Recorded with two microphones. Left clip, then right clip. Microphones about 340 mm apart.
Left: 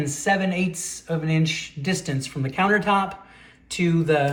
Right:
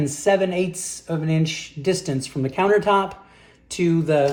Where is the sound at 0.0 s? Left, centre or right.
Right.